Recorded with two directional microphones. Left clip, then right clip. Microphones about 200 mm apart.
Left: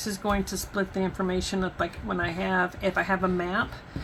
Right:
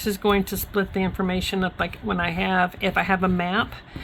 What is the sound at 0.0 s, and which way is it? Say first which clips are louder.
Speech: right 6 dB; 90° right.